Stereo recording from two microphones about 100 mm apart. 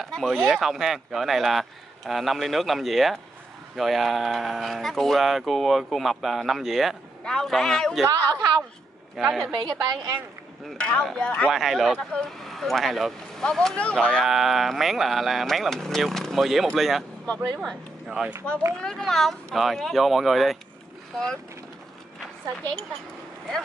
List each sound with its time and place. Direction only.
0.0 s speech: centre (ahead or behind)
8.1 s a woman's voice: 40° right (ahead or behind)
9.1 s speech: centre (ahead or behind)
9.6 s a woman's voice: 45° right (ahead or behind)
10.8 s speech: 10° left (ahead or behind)
11.5 s speech: centre (ahead or behind)
14.2 s speech: centre (ahead or behind)
18.8 s speech: 5° left (ahead or behind)